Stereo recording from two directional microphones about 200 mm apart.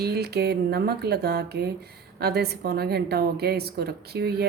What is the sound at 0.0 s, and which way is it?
Speech, 55° right (ahead or behind).